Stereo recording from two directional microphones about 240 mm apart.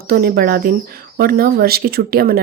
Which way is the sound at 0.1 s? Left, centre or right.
Right.